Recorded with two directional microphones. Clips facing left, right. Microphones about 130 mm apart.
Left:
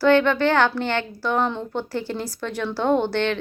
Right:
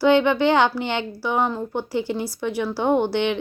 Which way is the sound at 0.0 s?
15° right (ahead or behind).